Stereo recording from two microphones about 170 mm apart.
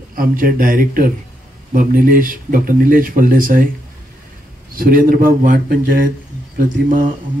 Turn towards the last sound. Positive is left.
turn(degrees=-55)  # may be behind; listen again after turning